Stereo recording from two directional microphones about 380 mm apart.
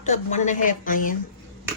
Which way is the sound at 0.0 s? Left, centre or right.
Centre.